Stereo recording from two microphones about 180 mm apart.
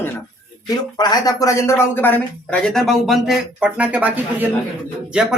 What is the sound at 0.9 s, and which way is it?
Speech, 20° left (ahead or behind).